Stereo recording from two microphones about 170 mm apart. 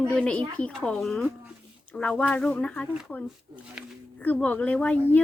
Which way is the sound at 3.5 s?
25° right (ahead or behind).